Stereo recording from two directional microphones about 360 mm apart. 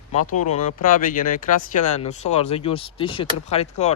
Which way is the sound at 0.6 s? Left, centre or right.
Left.